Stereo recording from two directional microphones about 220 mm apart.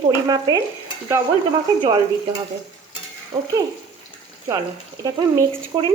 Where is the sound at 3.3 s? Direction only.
20° right (ahead or behind).